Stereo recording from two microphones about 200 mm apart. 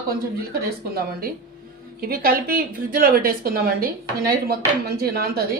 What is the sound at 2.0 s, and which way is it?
Speech, 50° right (ahead or behind).